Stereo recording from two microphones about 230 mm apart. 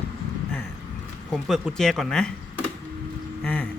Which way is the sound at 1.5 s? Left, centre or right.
Centre.